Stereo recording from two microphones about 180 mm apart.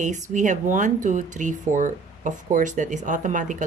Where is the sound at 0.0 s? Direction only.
45° right (ahead or behind).